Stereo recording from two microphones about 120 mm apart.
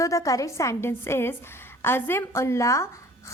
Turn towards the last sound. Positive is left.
turn(degrees=25)  # may be behind; listen again after turning